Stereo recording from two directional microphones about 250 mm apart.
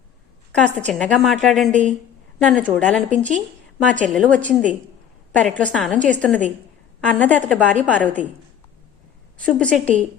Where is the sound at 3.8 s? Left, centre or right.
Right.